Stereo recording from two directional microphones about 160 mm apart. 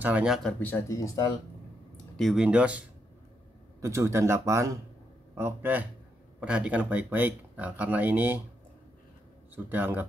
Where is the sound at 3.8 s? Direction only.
20° right (ahead or behind).